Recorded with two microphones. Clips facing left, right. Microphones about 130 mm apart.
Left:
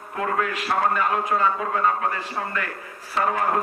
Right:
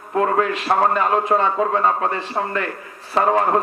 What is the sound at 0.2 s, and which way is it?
A man's voice, 30° right (ahead or behind).